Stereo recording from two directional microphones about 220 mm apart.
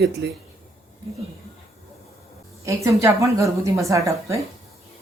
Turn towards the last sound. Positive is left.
turn(degrees=-15)  # may be behind; listen again after turning